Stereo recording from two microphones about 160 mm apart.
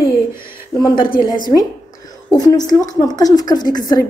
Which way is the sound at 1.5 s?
30° left (ahead or behind).